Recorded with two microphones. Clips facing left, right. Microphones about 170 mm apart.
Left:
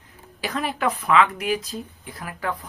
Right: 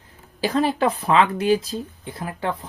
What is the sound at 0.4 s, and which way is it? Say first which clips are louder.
Speech: right 5 dB; 30° right (ahead or behind).